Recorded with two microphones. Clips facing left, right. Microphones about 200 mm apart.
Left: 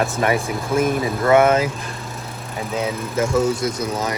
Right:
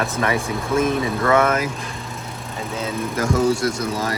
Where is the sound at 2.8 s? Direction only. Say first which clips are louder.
Left 2 dB; 25° left (ahead or behind).